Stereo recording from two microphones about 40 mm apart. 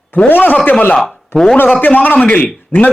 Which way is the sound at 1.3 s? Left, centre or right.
Left.